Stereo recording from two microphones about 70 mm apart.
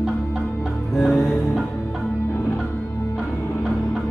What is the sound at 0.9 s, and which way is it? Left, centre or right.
Music, centre.